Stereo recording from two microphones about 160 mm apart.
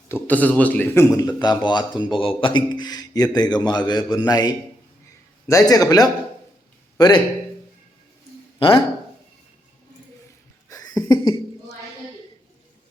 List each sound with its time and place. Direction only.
0.1 s a man's voice: 10° left (ahead or behind)
8.5 s speech: 30° left (ahead or behind)
10.7 s cough: 20° left (ahead or behind)